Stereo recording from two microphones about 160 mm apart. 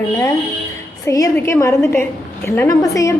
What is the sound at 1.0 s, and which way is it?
A woman's voice, 20° left (ahead or behind).